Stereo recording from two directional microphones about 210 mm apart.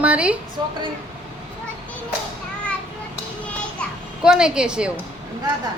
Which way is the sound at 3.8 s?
5° right (ahead or behind).